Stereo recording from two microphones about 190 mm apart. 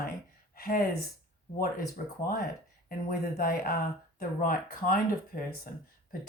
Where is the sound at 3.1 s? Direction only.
50° left (ahead or behind).